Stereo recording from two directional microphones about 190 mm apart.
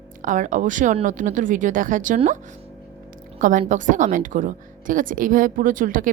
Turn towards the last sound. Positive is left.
turn(degrees=-45)  # may be behind; listen again after turning